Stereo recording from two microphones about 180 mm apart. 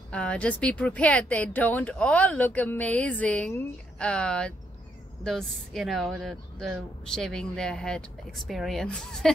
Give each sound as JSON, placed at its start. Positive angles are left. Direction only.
{"t": 0.1, "sound": "speech", "side_deg": 5}